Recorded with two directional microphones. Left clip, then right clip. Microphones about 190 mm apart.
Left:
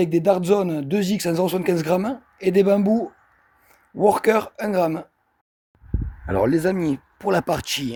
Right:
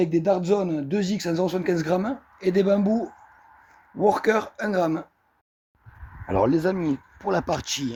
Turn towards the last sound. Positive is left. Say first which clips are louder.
# left 3 dB
turn(degrees=40)  # may be behind; listen again after turning